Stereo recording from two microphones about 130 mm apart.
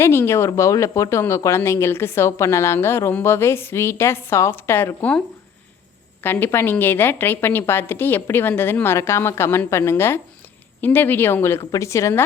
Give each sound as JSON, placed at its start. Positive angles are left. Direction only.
{"t": 0.0, "sound": "speech", "side_deg": 20}
{"t": 6.2, "sound": "a woman's voice", "side_deg": 15}